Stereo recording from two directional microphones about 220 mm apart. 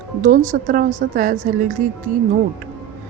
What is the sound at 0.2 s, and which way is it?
Speech, 35° right (ahead or behind).